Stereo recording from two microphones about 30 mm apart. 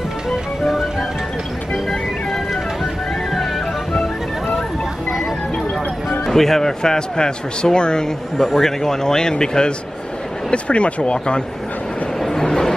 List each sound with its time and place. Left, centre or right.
1.9 s music: centre
6.2 s speech: centre; by 8.1 s left
8.4 s speech: centre; by 9.7 s left
10.5 s speech: left
12.2 s a sound: centre